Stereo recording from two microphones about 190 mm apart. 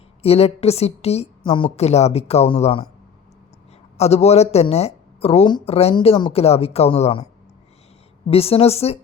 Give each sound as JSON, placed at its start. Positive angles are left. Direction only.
{"t": 0.2, "sound": "speech", "side_deg": 30}
{"t": 3.9, "sound": "speech", "side_deg": 35}
{"t": 8.3, "sound": "speech", "side_deg": 30}